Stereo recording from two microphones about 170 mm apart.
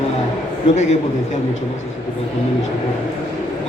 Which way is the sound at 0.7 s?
45° left (ahead or behind).